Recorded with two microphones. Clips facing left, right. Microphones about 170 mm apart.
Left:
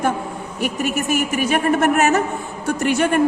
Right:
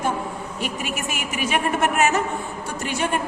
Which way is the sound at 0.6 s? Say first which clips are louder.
Left 8 dB; 45° left (ahead or behind).